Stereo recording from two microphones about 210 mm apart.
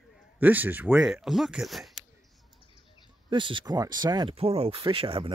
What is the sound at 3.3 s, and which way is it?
Speech, 20° right (ahead or behind).